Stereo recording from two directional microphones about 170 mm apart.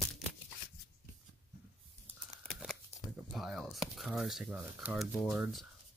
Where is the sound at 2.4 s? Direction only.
Centre (ahead or behind).